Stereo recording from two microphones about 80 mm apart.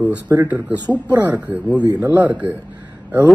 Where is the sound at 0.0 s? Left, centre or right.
Centre.